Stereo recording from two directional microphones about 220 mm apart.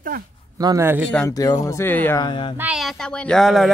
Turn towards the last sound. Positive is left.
turn(degrees=0)  # may be behind; listen again after turning